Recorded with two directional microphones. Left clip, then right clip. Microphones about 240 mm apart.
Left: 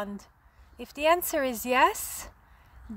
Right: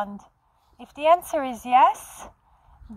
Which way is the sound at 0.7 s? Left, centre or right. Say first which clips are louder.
Right 5 dB; left.